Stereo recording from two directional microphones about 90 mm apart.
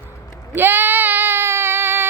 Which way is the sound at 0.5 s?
20° right (ahead or behind).